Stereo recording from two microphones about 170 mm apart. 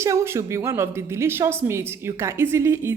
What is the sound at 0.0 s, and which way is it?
A woman's voice, 15° right (ahead or behind).